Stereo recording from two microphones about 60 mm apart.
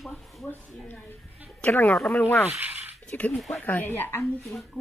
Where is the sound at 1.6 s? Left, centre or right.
Left.